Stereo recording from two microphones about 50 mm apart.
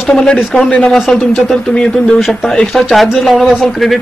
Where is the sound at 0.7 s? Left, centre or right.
Left.